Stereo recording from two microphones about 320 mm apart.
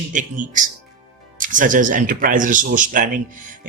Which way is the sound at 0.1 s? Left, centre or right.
Right.